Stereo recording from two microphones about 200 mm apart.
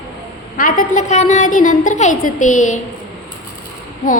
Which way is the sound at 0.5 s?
40° left (ahead or behind).